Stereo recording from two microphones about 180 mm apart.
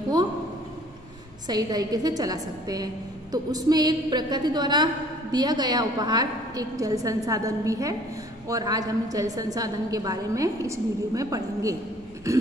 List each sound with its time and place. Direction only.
1.5 s a woman's voice: 20° right (ahead or behind)
12.3 s throat clearing: 15° right (ahead or behind)